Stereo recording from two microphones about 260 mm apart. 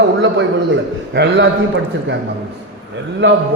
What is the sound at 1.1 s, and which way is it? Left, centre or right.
Speech, right.